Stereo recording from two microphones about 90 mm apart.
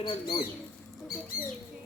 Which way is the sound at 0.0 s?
65° left (ahead or behind).